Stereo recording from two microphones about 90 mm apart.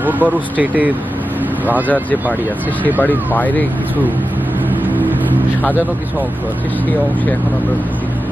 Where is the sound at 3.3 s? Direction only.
20° left (ahead or behind).